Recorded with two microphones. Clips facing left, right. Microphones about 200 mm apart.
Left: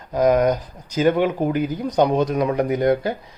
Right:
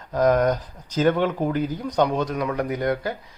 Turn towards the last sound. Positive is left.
turn(degrees=20)  # may be behind; listen again after turning